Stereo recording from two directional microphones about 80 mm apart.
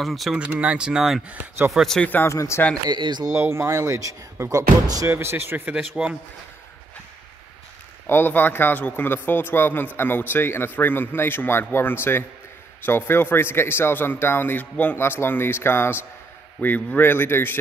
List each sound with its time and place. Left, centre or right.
0.0 s speech: centre
0.4 s speech: centre
2.0 s a man's voice: left
2.3 s speech: left
2.9 s speech: right
3.3 s speech: right
5.1 s speech: right
5.8 s speech: centre
8.1 s a man's voice: left